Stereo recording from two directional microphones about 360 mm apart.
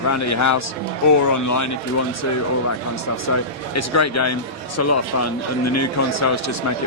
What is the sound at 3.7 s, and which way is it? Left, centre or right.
Speech, left.